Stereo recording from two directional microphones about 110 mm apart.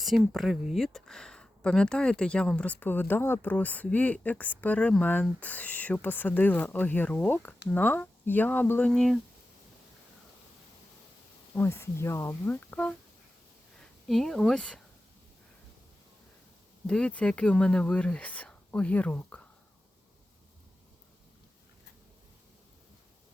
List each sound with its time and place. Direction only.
0.0 s speech: centre (ahead or behind); by 8.9 s 15° left (ahead or behind)
8.9 s speech: centre (ahead or behind)
11.5 s speech: 20° left (ahead or behind)
16.8 s speech: 10° left (ahead or behind)